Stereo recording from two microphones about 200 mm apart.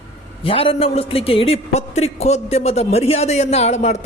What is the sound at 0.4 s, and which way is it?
A man's voice, 25° left (ahead or behind).